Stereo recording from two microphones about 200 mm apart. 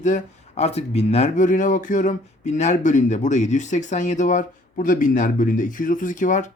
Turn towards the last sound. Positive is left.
turn(degrees=40)  # may be behind; listen again after turning